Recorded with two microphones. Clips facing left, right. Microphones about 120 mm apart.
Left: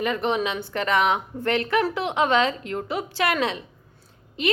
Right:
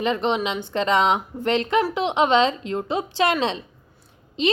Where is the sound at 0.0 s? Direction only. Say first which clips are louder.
Right 2 dB; 25° right (ahead or behind).